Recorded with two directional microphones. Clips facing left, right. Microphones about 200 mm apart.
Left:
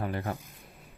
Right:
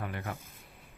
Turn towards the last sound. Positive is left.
turn(degrees=35)  # may be behind; listen again after turning